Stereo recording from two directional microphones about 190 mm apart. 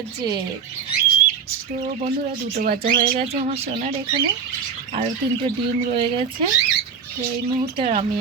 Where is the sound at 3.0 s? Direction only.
35° right (ahead or behind).